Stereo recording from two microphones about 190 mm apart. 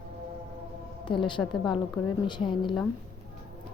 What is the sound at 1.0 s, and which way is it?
A woman's voice, 25° left (ahead or behind).